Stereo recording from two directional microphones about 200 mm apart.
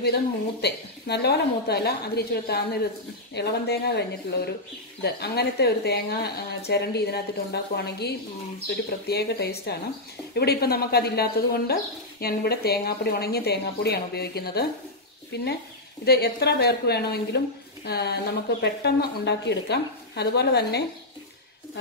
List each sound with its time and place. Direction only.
0.0 s speech: 55° left (ahead or behind)
5.0 s speech: 55° left (ahead or behind)
16.1 s speech: 55° left (ahead or behind)